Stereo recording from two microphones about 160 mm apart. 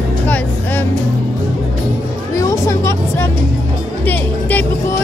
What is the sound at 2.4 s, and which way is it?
Speech, 20° left (ahead or behind).